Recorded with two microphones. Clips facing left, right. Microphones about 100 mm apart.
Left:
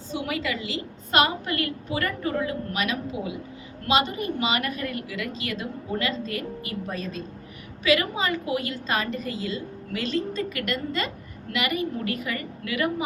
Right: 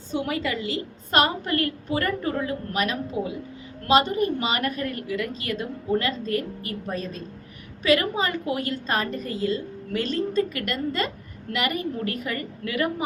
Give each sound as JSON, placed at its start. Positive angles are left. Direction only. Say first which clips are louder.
{"t": 0.1, "sound": "a woman's voice", "louder": "right 2 dB", "side_deg": -35}